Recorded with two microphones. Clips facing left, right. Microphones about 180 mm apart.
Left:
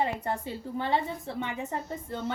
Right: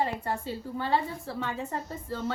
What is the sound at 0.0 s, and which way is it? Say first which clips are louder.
A woman's voice: even; 20° left (ahead or behind).